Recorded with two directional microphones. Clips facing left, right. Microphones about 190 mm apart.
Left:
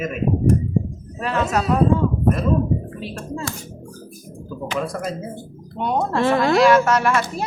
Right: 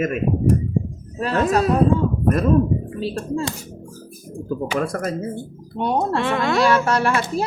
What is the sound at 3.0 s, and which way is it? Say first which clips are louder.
Speech: right 5 dB; 30° right (ahead or behind).